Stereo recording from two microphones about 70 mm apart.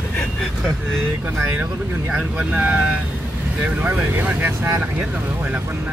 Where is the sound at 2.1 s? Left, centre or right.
Centre.